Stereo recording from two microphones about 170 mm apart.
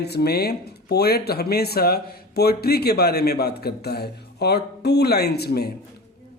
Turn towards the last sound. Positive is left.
turn(degrees=65)  # may be behind; listen again after turning